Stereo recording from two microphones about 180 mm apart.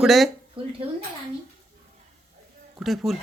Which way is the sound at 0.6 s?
30° right (ahead or behind).